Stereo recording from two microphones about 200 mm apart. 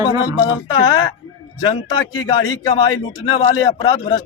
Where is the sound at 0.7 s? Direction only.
20° left (ahead or behind).